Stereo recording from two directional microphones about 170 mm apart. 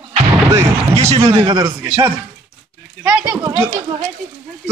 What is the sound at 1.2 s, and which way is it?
Speech, 20° right (ahead or behind).